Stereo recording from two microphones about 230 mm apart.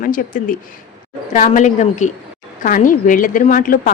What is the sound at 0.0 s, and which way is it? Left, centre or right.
A woman's voice, left.